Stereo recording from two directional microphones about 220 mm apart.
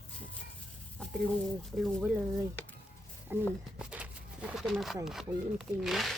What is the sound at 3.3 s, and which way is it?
Speech, 10° right (ahead or behind).